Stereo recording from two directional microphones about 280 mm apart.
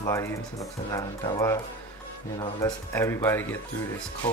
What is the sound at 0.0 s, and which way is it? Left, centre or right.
Speech, centre.